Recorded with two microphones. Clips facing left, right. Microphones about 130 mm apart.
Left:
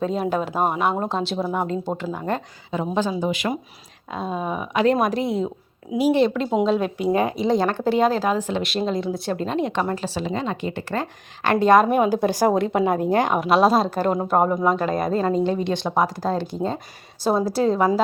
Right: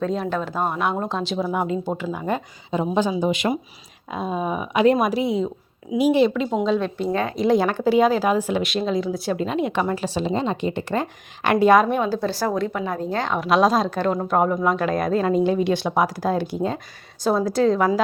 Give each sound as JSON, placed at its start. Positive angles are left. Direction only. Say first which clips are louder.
{"t": 0.0, "sound": "a woman's voice", "louder": "left 1 dB", "side_deg": 5}
{"t": 2.1, "sound": "speech", "louder": "right 1 dB", "side_deg": -10}
{"t": 4.1, "sound": "speech", "louder": "right 1 dB", "side_deg": -10}
{"t": 6.0, "sound": "speech", "louder": "right 1 dB", "side_deg": -15}
{"t": 6.2, "sound": "speech", "louder": "right 1 dB", "side_deg": -5}
{"t": 6.5, "sound": "a woman's voice", "louder": "left 1 dB", "side_deg": 10}
{"t": 7.3, "sound": "speech", "louder": "right 1 dB", "side_deg": -5}
{"t": 8.6, "sound": "speech", "louder": "right 1 dB", "side_deg": 0}
{"t": 10.2, "sound": "a woman's voice", "louder": "right 3 dB", "side_deg": -25}
{"t": 11.6, "sound": "speech", "louder": "left 1 dB", "side_deg": 0}
{"t": 12.0, "sound": "a woman's voice", "louder": "left 4 dB", "side_deg": 15}
{"t": 13.4, "sound": "speech", "louder": "right 3 dB", "side_deg": 5}
{"t": 17.7, "sound": "a woman's voice", "louder": "left 1 dB", "side_deg": 30}